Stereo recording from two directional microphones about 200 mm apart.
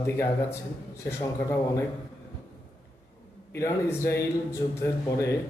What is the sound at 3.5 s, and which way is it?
A man's voice, 15° left (ahead or behind).